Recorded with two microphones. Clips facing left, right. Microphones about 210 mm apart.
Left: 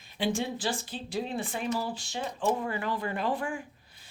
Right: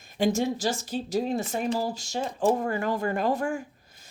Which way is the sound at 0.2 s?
45° right (ahead or behind).